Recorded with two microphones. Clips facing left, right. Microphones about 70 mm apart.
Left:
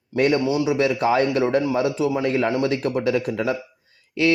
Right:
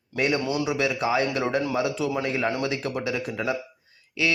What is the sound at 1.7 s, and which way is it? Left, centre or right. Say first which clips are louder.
Speech: left 4 dB; left.